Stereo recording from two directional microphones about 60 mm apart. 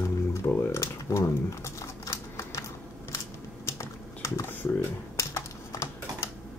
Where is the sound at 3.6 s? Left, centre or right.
Left.